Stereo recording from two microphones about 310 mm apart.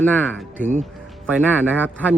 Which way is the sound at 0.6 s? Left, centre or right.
Right.